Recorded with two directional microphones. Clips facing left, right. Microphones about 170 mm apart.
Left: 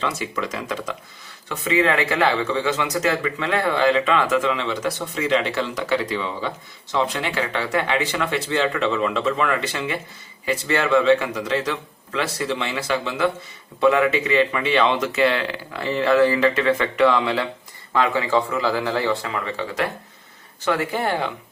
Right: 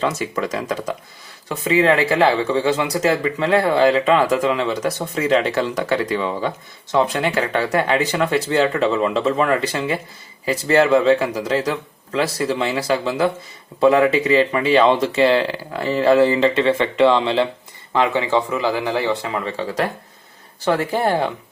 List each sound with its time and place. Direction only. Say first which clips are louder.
0.0 s speech: right 4 dB; 40° right (ahead or behind); by 19.4 s 20° right (ahead or behind)
19.5 s speech: right 3 dB; 35° right (ahead or behind)